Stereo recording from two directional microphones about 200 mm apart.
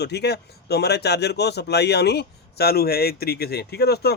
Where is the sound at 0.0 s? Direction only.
55° left (ahead or behind).